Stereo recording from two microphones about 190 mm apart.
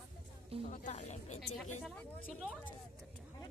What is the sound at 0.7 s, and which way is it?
Speech, 40° left (ahead or behind).